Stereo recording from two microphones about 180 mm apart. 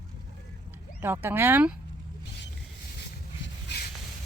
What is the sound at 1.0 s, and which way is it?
Speech, 10° right (ahead or behind).